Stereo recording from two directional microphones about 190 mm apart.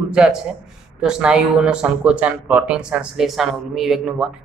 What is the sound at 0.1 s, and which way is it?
A man's voice, 5° right (ahead or behind).